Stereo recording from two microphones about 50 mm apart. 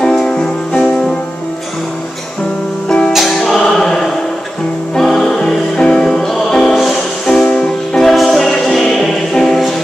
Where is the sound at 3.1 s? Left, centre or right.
Centre.